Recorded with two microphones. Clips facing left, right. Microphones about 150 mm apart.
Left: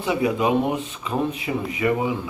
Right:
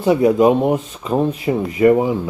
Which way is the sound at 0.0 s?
45° right (ahead or behind).